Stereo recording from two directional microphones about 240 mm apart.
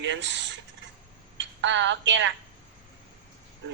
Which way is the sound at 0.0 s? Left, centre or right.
Right.